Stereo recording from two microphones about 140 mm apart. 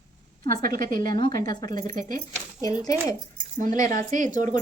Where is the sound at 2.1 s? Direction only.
25° left (ahead or behind).